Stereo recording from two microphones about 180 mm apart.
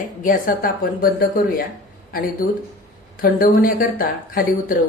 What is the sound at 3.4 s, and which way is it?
Speech, 55° left (ahead or behind).